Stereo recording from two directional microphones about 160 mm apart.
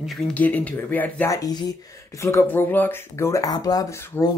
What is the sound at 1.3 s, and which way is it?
Speech, 25° left (ahead or behind).